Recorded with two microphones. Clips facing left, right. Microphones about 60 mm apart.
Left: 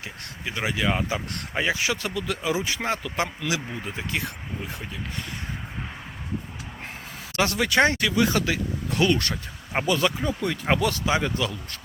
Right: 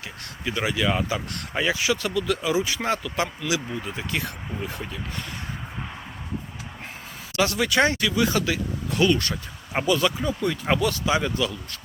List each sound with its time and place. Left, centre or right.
0.4 s speech: left
1.7 s speech: left; by 4.9 s centre
7.3 s speech: left
9.0 s speech: left
10.2 s speech: left